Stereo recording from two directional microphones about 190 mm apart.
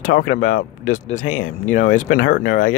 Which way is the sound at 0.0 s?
50° left (ahead or behind).